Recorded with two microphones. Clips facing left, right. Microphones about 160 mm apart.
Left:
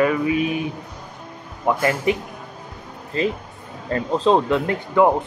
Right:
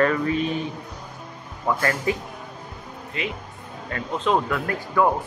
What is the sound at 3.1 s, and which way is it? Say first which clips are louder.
Speech: left 8 dB; 35° left (ahead or behind).